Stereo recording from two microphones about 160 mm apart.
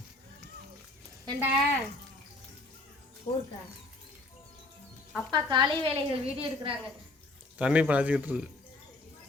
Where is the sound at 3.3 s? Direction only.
25° left (ahead or behind).